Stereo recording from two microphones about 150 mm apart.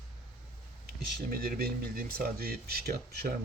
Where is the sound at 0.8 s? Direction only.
85° right.